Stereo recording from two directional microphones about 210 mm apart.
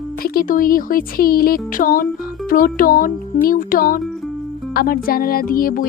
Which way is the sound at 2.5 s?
40° left (ahead or behind).